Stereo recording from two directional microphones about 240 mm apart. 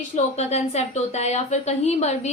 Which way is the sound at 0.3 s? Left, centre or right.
Left.